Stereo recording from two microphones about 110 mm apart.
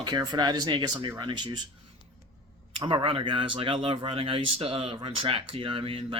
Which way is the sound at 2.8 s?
55° right (ahead or behind).